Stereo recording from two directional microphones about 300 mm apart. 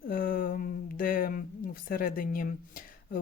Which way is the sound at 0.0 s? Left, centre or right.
Left.